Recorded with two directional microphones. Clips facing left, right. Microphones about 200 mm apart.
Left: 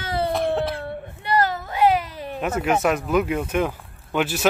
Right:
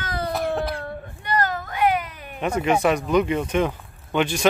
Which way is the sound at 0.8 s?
25° left (ahead or behind).